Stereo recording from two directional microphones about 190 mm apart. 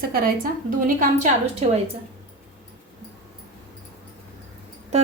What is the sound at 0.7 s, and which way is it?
A woman's voice, 45° right (ahead or behind).